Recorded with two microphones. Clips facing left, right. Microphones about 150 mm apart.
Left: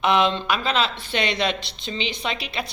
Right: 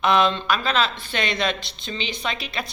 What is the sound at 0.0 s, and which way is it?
Speech, 20° left (ahead or behind).